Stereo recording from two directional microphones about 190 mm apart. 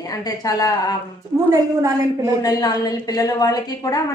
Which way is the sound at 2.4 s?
20° left (ahead or behind).